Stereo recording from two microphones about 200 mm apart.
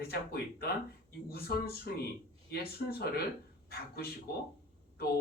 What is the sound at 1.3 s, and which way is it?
Speech, 50° left (ahead or behind).